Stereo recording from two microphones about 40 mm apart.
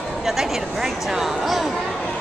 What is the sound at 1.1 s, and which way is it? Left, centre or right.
Speech, centre.